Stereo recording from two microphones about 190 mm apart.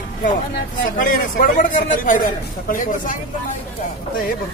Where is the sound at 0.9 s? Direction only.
45° left (ahead or behind).